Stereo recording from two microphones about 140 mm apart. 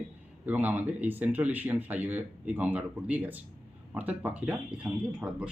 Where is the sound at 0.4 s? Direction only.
10° right (ahead or behind).